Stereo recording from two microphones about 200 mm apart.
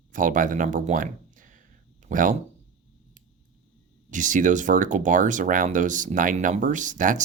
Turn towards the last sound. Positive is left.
turn(degrees=-40)  # may be behind; listen again after turning